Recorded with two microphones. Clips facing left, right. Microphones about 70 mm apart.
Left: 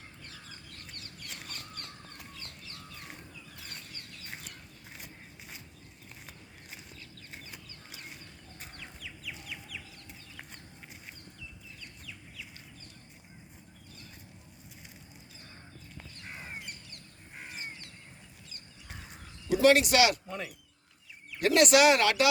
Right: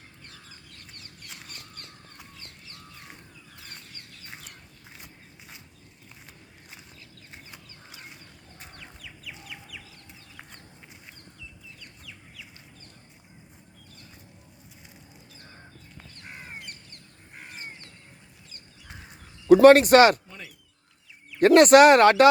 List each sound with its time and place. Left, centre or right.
19.5 s speech: right
21.3 s speech: right